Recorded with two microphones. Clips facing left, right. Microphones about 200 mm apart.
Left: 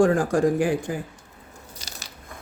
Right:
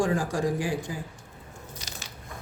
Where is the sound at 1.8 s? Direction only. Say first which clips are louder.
Left 2 dB; 35° left (ahead or behind).